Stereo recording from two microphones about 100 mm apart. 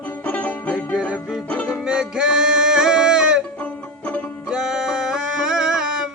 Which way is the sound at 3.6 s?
15° left (ahead or behind).